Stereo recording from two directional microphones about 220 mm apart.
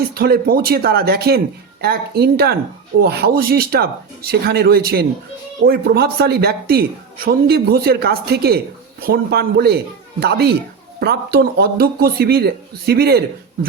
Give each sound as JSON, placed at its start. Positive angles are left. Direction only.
{"t": 0.1, "sound": "speech", "side_deg": -45}